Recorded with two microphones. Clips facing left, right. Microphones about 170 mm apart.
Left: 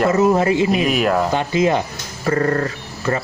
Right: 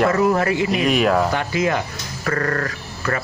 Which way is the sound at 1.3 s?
20° left (ahead or behind).